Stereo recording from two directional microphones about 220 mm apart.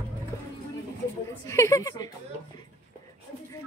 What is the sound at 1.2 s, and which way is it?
Speech, 15° left (ahead or behind).